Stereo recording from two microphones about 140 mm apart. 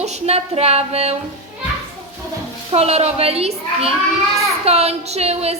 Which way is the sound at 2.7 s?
45° right (ahead or behind).